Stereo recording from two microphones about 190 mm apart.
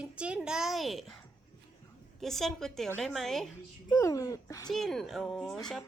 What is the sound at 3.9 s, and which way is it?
Speech, 15° left (ahead or behind).